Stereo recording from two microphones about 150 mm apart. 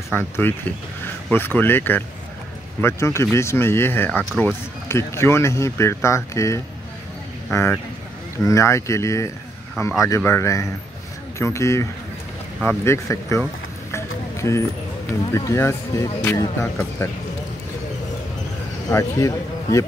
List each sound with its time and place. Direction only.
0.1 s speech: 15° left (ahead or behind)
13.9 s music: 20° left (ahead or behind)
15.3 s speech: 20° left (ahead or behind)
18.9 s speech: 20° left (ahead or behind)